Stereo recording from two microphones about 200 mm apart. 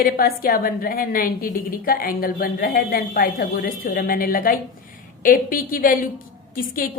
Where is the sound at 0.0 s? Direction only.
50° left (ahead or behind).